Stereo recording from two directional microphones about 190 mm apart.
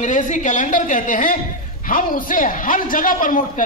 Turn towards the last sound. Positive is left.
turn(degrees=45)  # may be behind; listen again after turning